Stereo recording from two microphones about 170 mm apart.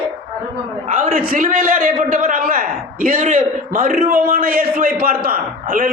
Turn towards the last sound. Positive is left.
turn(degrees=-55)  # may be behind; listen again after turning